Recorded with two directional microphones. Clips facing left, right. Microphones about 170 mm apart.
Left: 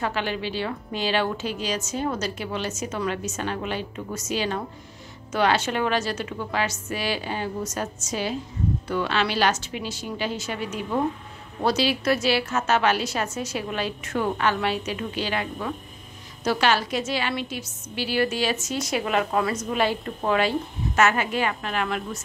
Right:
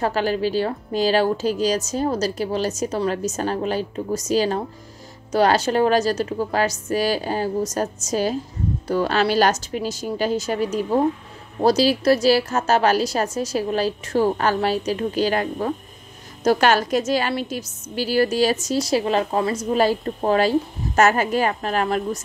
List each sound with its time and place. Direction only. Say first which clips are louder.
0.0 s a woman's voice: right 6 dB; 40° right (ahead or behind)